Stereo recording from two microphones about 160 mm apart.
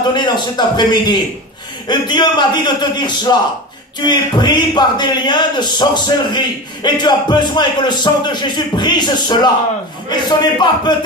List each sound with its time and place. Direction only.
0.1 s speech: 25° left (ahead or behind)